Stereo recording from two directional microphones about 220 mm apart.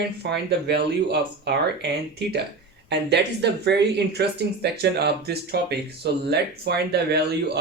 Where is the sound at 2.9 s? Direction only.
50° right (ahead or behind).